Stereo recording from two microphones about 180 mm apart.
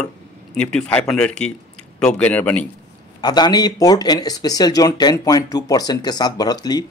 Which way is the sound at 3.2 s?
25° left (ahead or behind).